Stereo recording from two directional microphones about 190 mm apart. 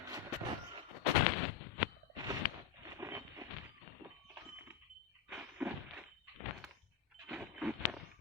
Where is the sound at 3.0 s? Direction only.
15° right (ahead or behind).